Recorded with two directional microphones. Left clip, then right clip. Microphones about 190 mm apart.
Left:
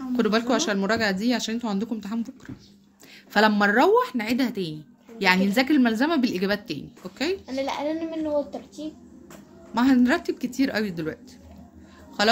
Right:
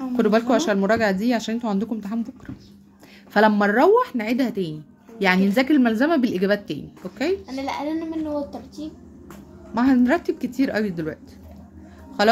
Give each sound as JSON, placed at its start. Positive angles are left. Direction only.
{"t": 0.1, "sound": "a woman's voice", "side_deg": -5}
{"t": 7.4, "sound": "speech", "side_deg": 50}
{"t": 9.8, "sound": "a woman's voice", "side_deg": 0}
{"t": 12.2, "sound": "speech", "side_deg": -5}